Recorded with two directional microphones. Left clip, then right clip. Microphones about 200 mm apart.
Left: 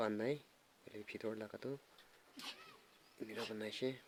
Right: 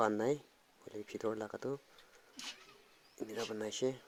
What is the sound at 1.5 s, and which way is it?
Speech, centre (ahead or behind).